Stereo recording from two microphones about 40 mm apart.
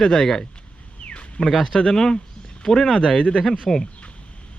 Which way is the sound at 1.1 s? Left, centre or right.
Left.